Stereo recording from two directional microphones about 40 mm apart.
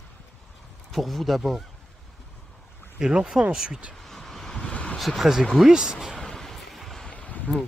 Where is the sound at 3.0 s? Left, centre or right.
Centre.